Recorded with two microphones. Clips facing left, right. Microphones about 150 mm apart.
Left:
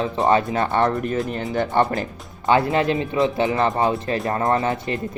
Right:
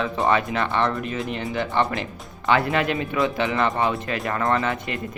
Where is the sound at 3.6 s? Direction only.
35° left (ahead or behind).